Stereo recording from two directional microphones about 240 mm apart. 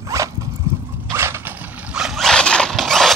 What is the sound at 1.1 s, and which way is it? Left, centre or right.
Zipper, centre.